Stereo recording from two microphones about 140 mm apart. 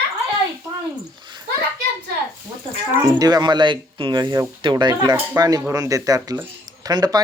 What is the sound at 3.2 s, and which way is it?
Speech, 30° right (ahead or behind).